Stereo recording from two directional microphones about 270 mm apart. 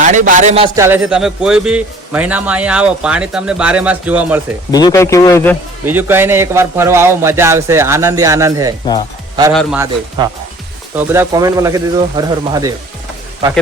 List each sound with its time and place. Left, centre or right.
0.0 s speech: right
0.8 s a man's voice: centre
4.7 s a man's voice: centre
5.8 s a man's voice: centre
8.8 s speech: centre
9.5 s a man's voice: centre
10.9 s a man's voice: centre